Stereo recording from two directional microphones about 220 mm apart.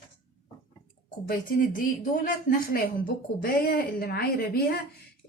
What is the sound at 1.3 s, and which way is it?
Speech, 40° left (ahead or behind).